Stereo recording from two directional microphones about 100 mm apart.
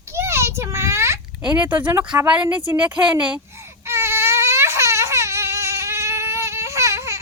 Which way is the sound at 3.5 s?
25° right (ahead or behind).